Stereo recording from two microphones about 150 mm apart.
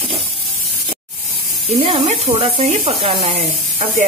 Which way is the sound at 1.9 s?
40° right (ahead or behind).